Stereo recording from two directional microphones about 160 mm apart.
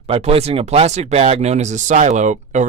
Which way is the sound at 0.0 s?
40° right (ahead or behind).